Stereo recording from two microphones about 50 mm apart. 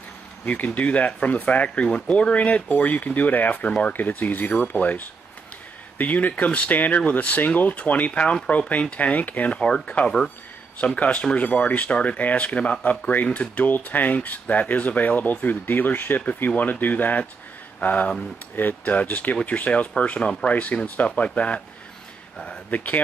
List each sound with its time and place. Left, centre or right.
0.5 s speech: left
9.5 s speech: centre
11.0 s speech: left
22.7 s speech: left